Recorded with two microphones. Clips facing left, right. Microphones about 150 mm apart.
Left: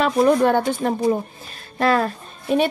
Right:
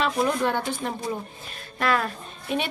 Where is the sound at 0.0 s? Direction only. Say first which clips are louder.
Left 8 dB; 50° left (ahead or behind).